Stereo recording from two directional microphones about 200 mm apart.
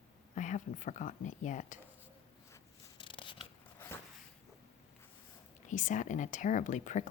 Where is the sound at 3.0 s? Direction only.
25° left (ahead or behind).